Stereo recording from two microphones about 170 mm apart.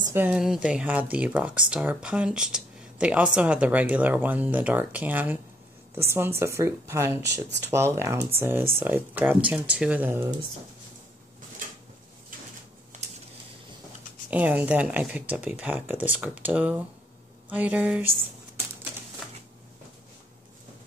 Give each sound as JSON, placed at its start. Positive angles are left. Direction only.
{"t": 0.0, "sound": "speech", "side_deg": -10}
{"t": 14.3, "sound": "speech", "side_deg": -10}